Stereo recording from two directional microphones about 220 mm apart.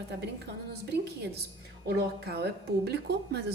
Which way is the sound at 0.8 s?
50° right (ahead or behind).